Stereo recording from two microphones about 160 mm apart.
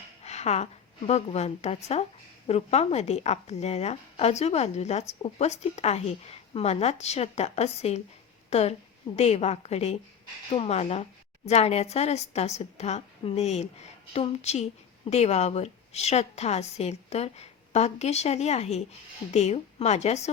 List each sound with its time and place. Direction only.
0.2 s a woman's voice: 45° left (ahead or behind)